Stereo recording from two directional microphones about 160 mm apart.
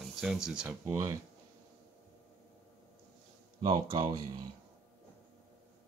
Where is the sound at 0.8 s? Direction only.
20° right (ahead or behind).